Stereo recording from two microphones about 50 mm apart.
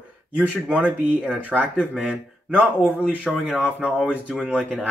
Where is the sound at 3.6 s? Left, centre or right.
Right.